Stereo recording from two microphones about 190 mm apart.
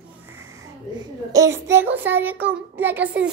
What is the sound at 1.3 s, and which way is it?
A child's voice, 15° right (ahead or behind).